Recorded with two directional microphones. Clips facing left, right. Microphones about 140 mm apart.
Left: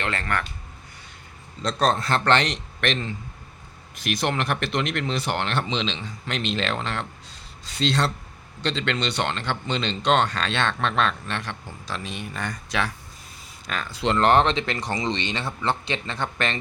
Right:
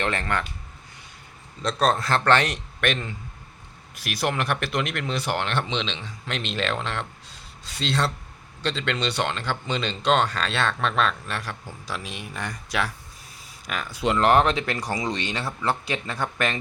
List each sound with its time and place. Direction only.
0.0 s speech: 20° right (ahead or behind)
1.6 s speech: 5° right (ahead or behind)